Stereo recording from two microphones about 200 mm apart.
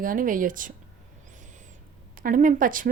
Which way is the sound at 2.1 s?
45° right (ahead or behind).